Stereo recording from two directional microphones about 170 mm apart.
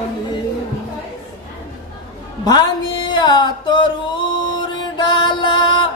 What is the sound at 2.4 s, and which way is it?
Music, 25° left (ahead or behind).